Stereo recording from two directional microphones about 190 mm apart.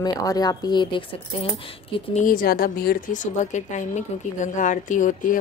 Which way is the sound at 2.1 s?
45° left (ahead or behind).